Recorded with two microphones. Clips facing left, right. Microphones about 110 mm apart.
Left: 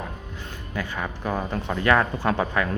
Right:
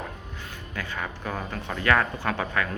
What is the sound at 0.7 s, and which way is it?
Speech, 15° left (ahead or behind).